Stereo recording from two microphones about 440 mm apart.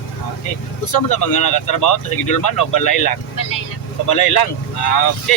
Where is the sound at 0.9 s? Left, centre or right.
Left.